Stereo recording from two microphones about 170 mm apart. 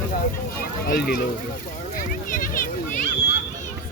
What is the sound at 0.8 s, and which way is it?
Speech, 60° left (ahead or behind).